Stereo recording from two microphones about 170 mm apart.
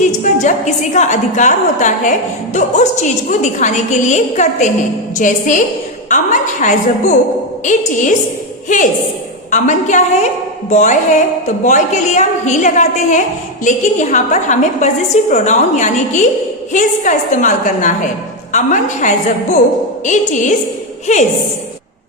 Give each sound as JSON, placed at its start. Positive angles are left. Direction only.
{"t": 0.4, "sound": "a woman's voice", "side_deg": 45}
{"t": 9.5, "sound": "a woman's voice", "side_deg": 45}